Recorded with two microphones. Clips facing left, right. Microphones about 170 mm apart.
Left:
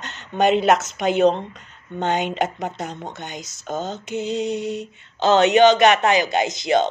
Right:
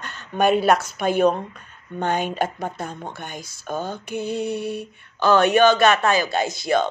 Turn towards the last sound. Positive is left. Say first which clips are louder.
# left 2 dB
turn(degrees=20)  # may be behind; listen again after turning